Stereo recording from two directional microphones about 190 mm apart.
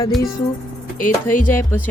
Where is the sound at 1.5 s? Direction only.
10° left (ahead or behind).